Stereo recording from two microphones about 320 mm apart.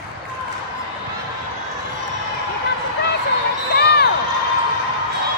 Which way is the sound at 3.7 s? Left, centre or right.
Left.